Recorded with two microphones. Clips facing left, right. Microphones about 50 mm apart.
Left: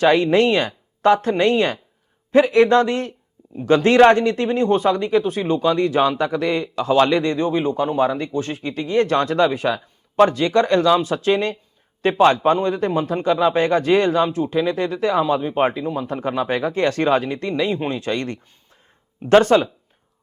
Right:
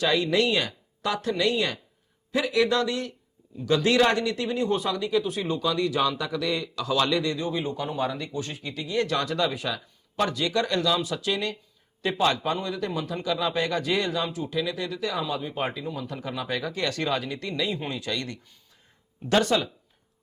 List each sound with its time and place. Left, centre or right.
0.0 s speech: left